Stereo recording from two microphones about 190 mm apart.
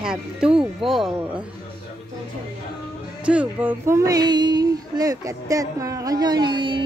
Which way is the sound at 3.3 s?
10° right (ahead or behind).